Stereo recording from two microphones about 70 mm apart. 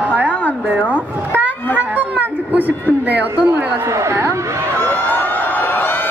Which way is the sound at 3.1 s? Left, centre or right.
Right.